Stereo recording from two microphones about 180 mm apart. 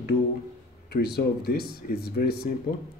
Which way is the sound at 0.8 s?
60° left (ahead or behind).